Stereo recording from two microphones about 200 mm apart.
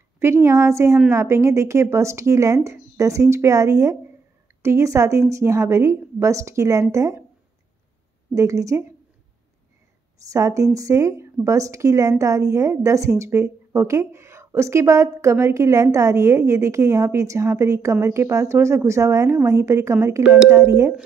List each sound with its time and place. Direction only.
0.2 s a woman's voice: 15° right (ahead or behind)
8.4 s a woman's voice: 15° right (ahead or behind)
10.3 s a woman's voice: 15° right (ahead or behind)